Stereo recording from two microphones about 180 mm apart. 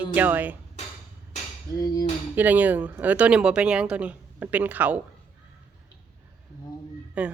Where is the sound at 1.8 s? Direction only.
20° left (ahead or behind).